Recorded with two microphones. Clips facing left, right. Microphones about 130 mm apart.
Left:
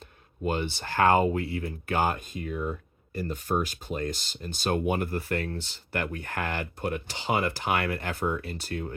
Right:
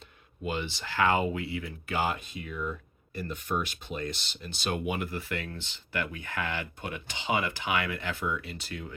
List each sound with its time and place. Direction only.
0.4 s speech: 50° left (ahead or behind)